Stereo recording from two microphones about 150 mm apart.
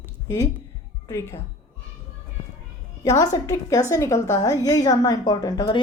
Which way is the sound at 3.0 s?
25° left (ahead or behind).